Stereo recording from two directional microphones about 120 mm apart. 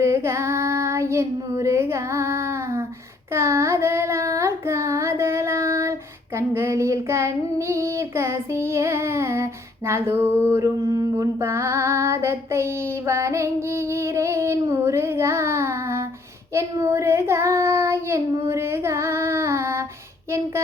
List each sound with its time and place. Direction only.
0.0 s child singing: 20° right (ahead or behind)